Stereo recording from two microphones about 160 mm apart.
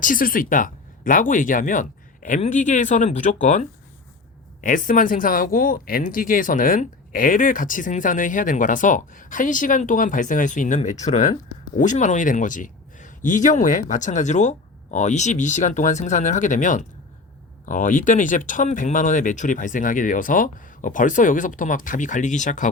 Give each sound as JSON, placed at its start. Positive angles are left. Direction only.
{"t": 0.0, "sound": "speech", "side_deg": 60}